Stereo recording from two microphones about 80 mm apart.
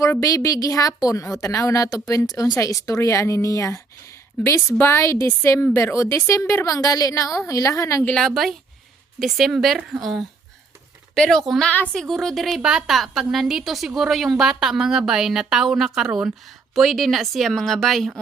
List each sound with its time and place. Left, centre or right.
0.2 s a woman's voice: left
6.7 s a woman's voice: left
8.3 s a woman's voice: centre
11.7 s a woman's voice: centre
11.9 s a woman's voice: centre